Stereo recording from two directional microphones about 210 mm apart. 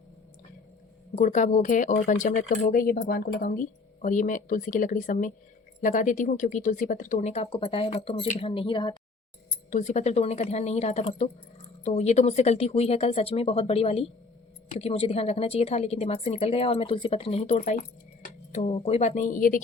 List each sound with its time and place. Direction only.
1.1 s speech: 35° left (ahead or behind)
9.6 s a woman's voice: 35° left (ahead or behind)